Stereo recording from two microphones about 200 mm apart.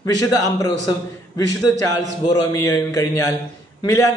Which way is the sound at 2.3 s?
20° left (ahead or behind).